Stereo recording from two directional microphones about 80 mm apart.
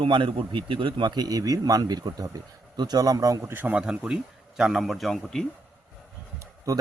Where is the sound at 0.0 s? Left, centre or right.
Right.